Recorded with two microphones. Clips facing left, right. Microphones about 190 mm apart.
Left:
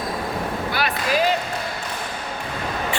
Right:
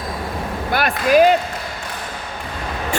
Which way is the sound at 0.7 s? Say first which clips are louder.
Right 9 dB; 50° right (ahead or behind).